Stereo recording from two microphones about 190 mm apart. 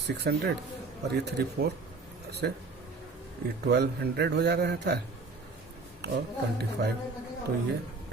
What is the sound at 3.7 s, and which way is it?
Speech, 60° right (ahead or behind).